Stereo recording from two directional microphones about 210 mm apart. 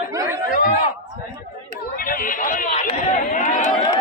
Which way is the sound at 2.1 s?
40° left (ahead or behind).